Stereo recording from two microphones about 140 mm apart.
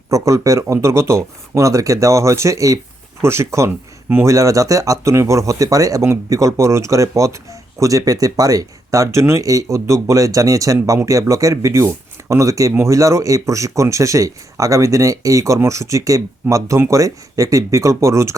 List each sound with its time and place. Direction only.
0.1 s speech: 20° right (ahead or behind)